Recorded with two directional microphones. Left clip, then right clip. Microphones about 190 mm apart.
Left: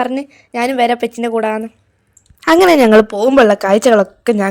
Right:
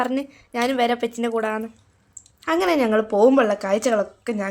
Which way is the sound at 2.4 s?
55° left (ahead or behind).